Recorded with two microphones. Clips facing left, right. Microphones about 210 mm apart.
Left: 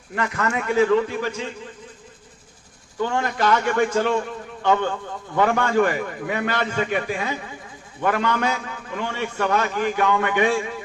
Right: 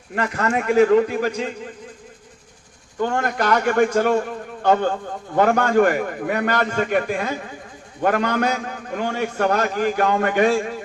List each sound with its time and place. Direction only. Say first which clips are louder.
0.2 s a man's voice: right 3 dB; 35° right (ahead or behind)
3.0 s a man's voice: right 1 dB; 50° right (ahead or behind)